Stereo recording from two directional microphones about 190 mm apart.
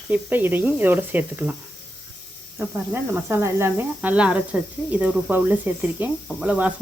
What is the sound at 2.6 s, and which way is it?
Speech, 10° right (ahead or behind).